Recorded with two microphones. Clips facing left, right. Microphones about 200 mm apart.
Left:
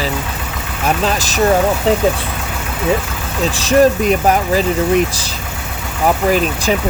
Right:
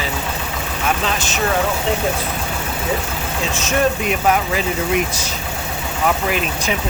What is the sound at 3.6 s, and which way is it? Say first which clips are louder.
Speech: left 8 dB; 35° left (ahead or behind).